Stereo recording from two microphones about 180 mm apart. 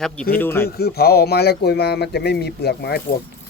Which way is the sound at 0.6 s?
60° left (ahead or behind).